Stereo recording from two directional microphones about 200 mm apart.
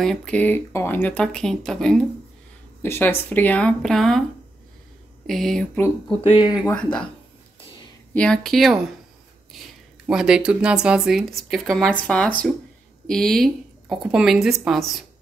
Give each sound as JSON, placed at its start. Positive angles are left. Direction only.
{"t": 0.0, "sound": "speech", "side_deg": 5}
{"t": 5.2, "sound": "speech", "side_deg": 0}
{"t": 6.0, "sound": "speech", "side_deg": 25}
{"t": 6.7, "sound": "speech", "side_deg": 5}
{"t": 8.1, "sound": "speech", "side_deg": 5}